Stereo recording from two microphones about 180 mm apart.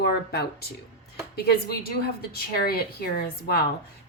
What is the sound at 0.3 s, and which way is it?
A woman's voice, 65° left (ahead or behind).